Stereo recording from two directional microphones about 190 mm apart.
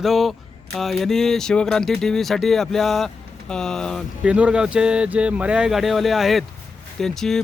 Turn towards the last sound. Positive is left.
turn(degrees=0)  # may be behind; listen again after turning